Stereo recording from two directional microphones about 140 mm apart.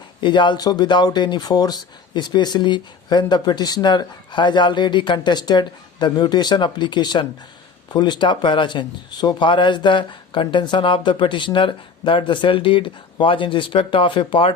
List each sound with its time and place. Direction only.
0.2 s speech: 35° left (ahead or behind)